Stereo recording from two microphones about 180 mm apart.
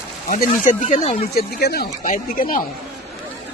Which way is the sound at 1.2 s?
60° left (ahead or behind).